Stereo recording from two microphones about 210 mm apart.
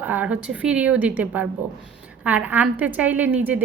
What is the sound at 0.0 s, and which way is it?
A woman's voice, 10° right (ahead or behind).